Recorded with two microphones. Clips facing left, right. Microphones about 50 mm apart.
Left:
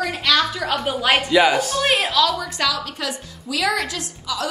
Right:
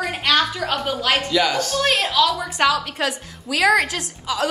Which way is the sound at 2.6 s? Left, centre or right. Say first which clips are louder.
Right 5 dB; right.